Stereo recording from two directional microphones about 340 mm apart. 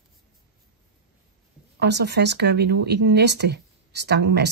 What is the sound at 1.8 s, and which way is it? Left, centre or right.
Speech, right.